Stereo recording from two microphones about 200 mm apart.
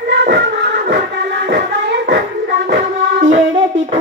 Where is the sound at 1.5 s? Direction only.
60° right (ahead or behind).